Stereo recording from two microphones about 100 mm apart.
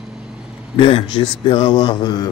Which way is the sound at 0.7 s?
60° left (ahead or behind).